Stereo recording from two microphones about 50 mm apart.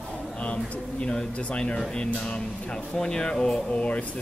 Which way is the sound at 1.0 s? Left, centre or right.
Centre.